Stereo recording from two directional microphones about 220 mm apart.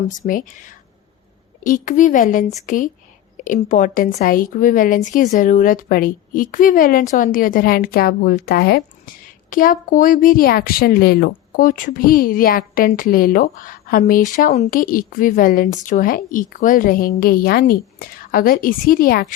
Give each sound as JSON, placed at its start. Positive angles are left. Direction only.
{"t": 0.3, "sound": "a woman's voice", "side_deg": 40}